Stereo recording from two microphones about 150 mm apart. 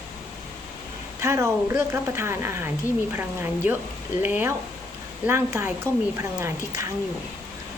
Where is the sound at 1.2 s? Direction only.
20° right (ahead or behind).